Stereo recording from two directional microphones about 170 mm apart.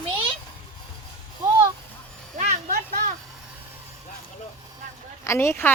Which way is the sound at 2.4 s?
45° right (ahead or behind).